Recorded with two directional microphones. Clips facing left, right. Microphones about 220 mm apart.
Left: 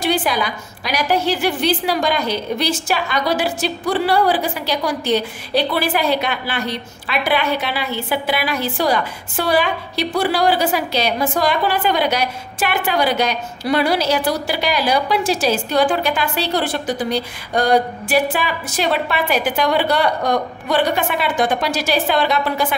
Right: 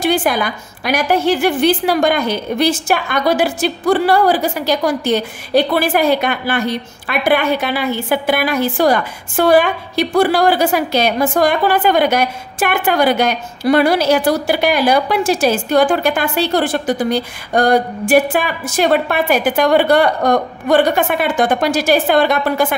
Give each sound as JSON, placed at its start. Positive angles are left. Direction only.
{"t": 0.0, "sound": "a woman's voice", "side_deg": -50}